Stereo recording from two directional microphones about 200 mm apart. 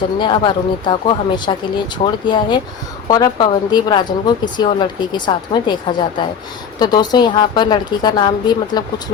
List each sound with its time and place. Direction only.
0.2 s speech: 25° left (ahead or behind)